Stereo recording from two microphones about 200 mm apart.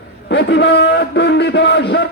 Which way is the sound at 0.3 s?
60° left (ahead or behind).